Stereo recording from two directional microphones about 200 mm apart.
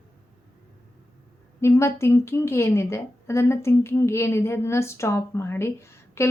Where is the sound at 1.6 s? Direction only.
15° left (ahead or behind).